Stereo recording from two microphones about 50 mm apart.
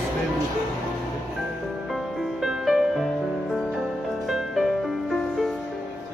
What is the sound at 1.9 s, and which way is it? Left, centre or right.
Music, centre.